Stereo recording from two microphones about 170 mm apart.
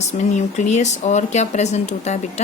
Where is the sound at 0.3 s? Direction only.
45° left (ahead or behind).